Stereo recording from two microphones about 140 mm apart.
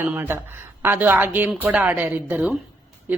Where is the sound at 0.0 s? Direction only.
15° right (ahead or behind).